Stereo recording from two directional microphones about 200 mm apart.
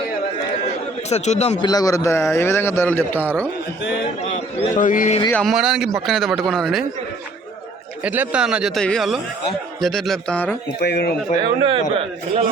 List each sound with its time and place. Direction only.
1.1 s a man's voice: 35° left (ahead or behind)
1.6 s a man's voice: 20° left (ahead or behind)
4.2 s a man's voice: 35° left (ahead or behind)
5.3 s a man's voice: centre (ahead or behind)
8.0 s a man's voice: 5° right (ahead or behind)
10.8 s speech: 55° left (ahead or behind)
11.6 s a man's voice: 25° right (ahead or behind)